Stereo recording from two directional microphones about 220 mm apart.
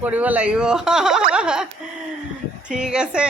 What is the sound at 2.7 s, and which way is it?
Speech, 5° right (ahead or behind).